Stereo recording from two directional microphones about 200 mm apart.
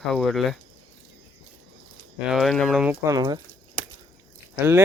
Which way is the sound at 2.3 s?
Centre (ahead or behind).